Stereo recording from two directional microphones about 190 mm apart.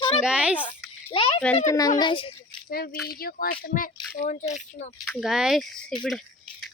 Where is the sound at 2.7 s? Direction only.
50° left (ahead or behind).